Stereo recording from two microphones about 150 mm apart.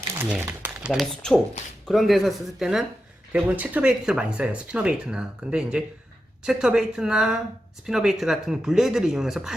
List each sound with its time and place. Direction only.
0.3 s speech: 10° right (ahead or behind)
1.6 s speech: 50° left (ahead or behind)
1.9 s speech: centre (ahead or behind)